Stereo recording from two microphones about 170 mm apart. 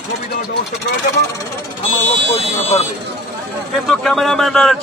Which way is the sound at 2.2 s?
40° left (ahead or behind).